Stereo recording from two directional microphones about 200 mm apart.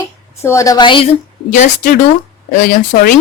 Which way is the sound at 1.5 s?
40° left (ahead or behind).